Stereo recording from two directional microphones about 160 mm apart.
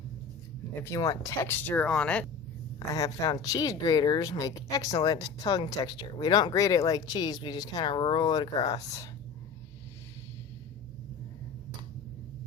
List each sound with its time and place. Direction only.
0.8 s speech: 20° left (ahead or behind)
2.7 s speech: 20° left (ahead or behind)